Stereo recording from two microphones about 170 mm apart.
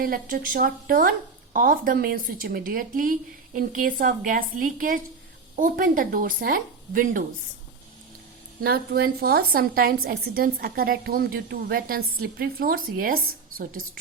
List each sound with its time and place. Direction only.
0.0 s a woman's voice: 55° right (ahead or behind)
8.6 s a woman's voice: 70° right (ahead or behind)